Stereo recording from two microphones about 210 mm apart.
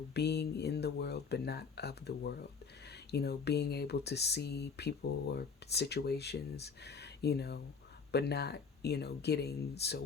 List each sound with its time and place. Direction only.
0.1 s speech: 50° left (ahead or behind)